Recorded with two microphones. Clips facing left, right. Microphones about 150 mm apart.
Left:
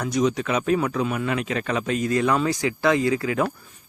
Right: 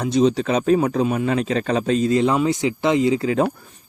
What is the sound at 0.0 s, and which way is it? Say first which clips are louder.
A man's voice: right 5 dB; 30° right (ahead or behind).